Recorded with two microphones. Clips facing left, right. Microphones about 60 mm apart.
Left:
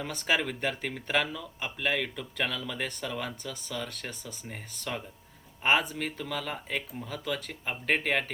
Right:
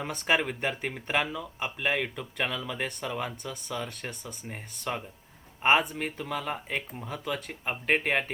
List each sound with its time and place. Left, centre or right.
0.0 s speech: centre